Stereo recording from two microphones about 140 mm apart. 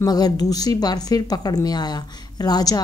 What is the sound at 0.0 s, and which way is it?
A woman's voice, 30° left (ahead or behind).